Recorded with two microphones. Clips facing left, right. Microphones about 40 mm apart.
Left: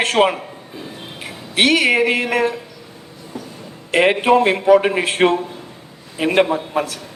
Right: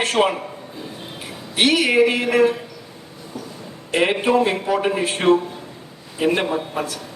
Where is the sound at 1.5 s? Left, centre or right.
Left.